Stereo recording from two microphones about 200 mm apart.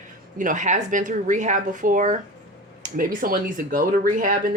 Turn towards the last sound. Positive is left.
turn(degrees=-45)  # may be behind; listen again after turning